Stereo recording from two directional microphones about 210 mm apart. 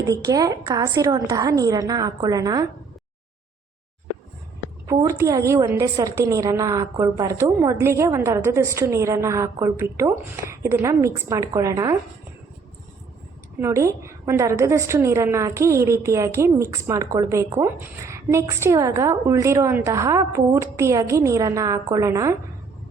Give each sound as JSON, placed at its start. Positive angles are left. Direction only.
{"t": 0.0, "sound": "a woman's voice", "side_deg": -15}
{"t": 4.9, "sound": "a woman's voice", "side_deg": -15}
{"t": 13.6, "sound": "a woman's voice", "side_deg": -15}